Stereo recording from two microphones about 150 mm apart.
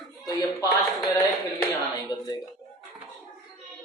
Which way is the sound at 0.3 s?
25° left (ahead or behind).